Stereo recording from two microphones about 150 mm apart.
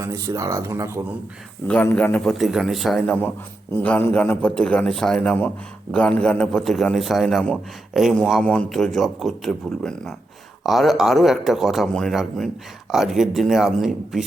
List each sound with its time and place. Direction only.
0.0 s speech: 20° right (ahead or behind)
1.6 s a man's voice: 10° left (ahead or behind)
2.4 s a man's voice: 5° right (ahead or behind)